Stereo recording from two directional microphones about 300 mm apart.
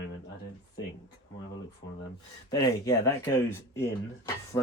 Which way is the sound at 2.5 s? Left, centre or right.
Centre.